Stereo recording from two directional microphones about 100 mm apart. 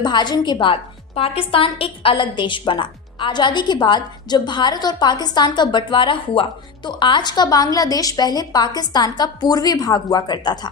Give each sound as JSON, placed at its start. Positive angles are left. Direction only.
{"t": 0.0, "sound": "a woman's voice", "side_deg": 45}